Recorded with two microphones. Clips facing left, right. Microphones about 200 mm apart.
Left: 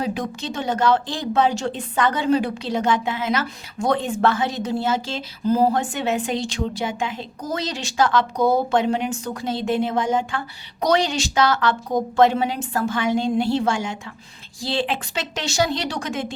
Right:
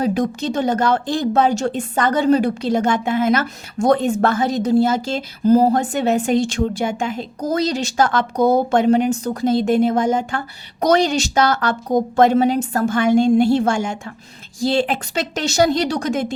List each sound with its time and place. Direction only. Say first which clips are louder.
0.0 s a woman's voice: right 7 dB; 40° right (ahead or behind)